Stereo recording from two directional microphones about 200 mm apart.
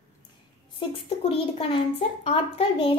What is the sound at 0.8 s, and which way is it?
A woman's voice, 25° left (ahead or behind).